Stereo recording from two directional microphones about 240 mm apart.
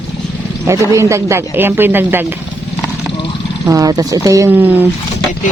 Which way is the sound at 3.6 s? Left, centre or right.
Centre.